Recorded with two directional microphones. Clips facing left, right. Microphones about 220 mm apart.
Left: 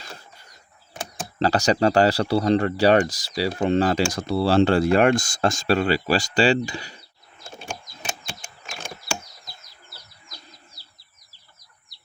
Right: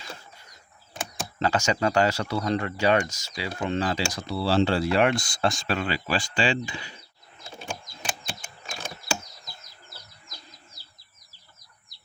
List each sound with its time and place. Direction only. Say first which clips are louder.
1.4 s speech: left 5 dB; 35° left (ahead or behind)